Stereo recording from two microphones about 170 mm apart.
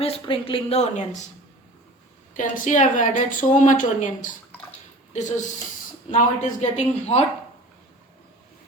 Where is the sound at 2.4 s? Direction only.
50° left (ahead or behind).